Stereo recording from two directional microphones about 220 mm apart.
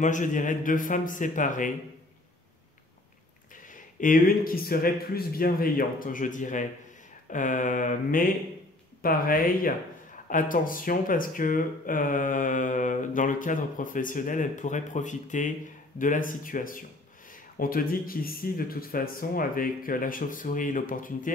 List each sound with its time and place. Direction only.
0.0 s speech: 35° left (ahead or behind)
3.7 s speech: 35° left (ahead or behind)